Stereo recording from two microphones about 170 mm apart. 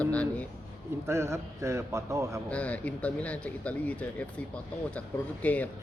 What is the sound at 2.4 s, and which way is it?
Speech, 10° left (ahead or behind).